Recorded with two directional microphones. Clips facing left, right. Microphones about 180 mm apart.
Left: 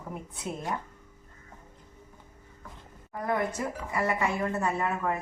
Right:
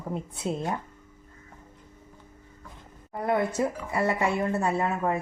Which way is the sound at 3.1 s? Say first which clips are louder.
Right 4 dB; 30° right (ahead or behind).